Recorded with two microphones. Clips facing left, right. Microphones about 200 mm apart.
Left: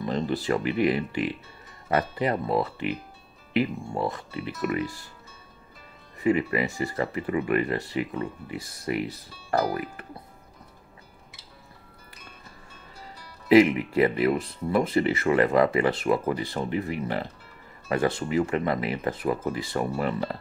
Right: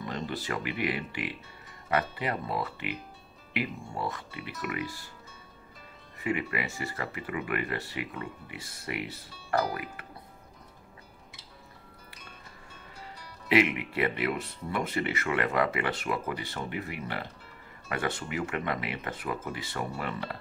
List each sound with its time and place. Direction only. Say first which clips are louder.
0.0 s speech: left 8 dB; 35° left (ahead or behind)
3.9 s speech: left 6 dB; 40° left (ahead or behind)
6.1 s speech: left 8 dB; 35° left (ahead or behind)
13.5 s speech: left 8 dB; 35° left (ahead or behind)